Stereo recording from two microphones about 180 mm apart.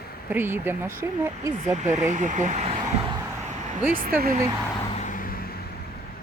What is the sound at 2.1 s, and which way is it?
Speech, 45° right (ahead or behind).